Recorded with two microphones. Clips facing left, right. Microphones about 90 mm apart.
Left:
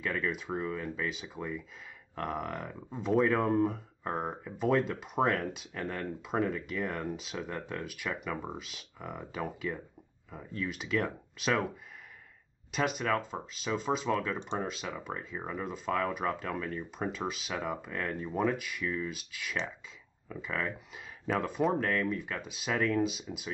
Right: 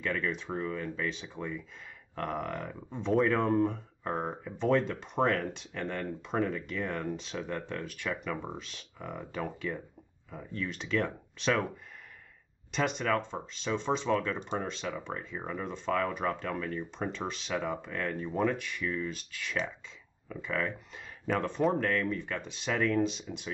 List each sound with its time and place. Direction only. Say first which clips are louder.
0.0 s speech: right 1 dB; 5° left (ahead or behind)
12.7 s speech: right 1 dB; 5° left (ahead or behind)